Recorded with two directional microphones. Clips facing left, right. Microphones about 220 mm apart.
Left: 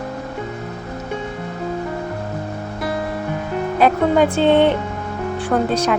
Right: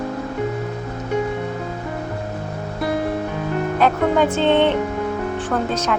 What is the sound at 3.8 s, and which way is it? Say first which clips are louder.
Speech: left 3 dB; 10° left (ahead or behind).